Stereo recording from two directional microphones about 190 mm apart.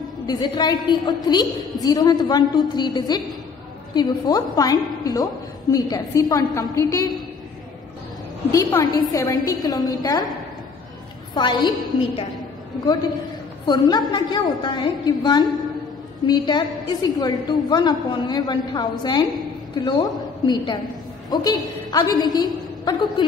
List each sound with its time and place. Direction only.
0.3 s a woman's voice: 20° left (ahead or behind)
8.5 s a woman's voice: 15° left (ahead or behind)
11.3 s a woman's voice: 25° left (ahead or behind)
13.7 s a woman's voice: 20° left (ahead or behind)